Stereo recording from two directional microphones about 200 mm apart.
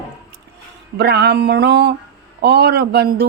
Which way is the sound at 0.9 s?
55° right (ahead or behind).